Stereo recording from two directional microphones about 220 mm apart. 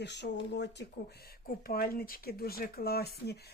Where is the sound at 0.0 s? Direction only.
50° left (ahead or behind).